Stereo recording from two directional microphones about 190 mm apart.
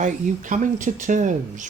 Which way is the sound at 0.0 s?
40° right (ahead or behind).